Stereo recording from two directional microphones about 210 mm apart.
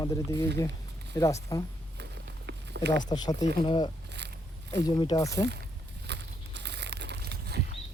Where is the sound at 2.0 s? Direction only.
55° right (ahead or behind).